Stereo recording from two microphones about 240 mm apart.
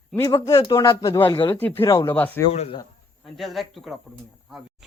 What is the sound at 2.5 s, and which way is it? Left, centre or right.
Speech, left.